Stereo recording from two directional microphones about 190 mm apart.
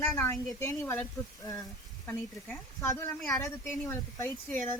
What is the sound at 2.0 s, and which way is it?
A woman's voice, 15° left (ahead or behind).